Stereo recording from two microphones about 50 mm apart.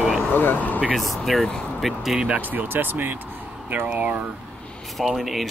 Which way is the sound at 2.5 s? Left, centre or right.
Right.